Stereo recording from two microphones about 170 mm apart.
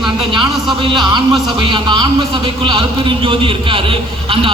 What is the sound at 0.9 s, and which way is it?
A man's voice, 25° right (ahead or behind).